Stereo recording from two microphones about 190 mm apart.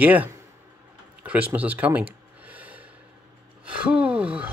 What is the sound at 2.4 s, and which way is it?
Snort, 5° right (ahead or behind).